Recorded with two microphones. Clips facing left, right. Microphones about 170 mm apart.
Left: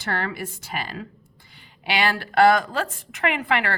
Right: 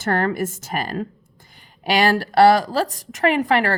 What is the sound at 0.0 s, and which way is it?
A woman's voice, 45° right (ahead or behind).